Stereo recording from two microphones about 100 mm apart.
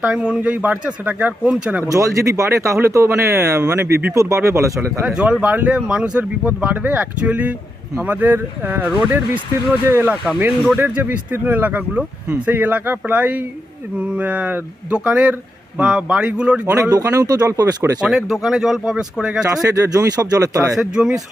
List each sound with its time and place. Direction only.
0.0 s speech: 10° right (ahead or behind)
1.9 s speech: 35° right (ahead or behind)
5.0 s speech: 10° right (ahead or behind)
16.9 s speech: 35° right (ahead or behind)
18.0 s speech: centre (ahead or behind)
19.6 s speech: 35° right (ahead or behind)
20.7 s speech: 5° right (ahead or behind)